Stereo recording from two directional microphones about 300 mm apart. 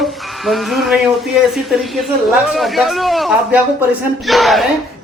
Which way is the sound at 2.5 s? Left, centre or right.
Centre.